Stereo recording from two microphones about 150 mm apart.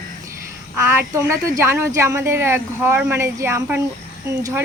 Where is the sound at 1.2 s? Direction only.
20° right (ahead or behind).